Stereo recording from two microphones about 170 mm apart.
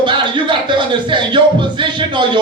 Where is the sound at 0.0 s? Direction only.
25° right (ahead or behind).